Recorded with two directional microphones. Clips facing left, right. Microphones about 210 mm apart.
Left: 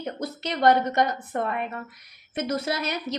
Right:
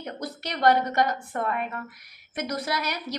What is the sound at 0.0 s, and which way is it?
A woman's voice, 25° left (ahead or behind).